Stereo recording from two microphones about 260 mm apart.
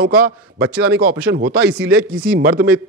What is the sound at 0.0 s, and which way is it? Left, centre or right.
A man's voice, right.